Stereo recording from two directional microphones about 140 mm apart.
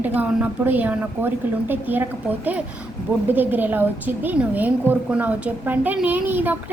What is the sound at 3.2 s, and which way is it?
A woman's voice, 15° right (ahead or behind).